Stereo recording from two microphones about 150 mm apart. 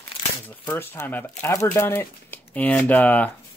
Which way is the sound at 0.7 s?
15° left (ahead or behind).